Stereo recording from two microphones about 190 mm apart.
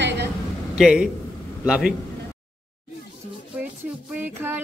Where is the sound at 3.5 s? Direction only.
5° right (ahead or behind).